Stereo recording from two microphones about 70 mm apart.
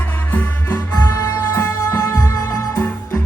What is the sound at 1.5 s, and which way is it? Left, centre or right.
Music, left.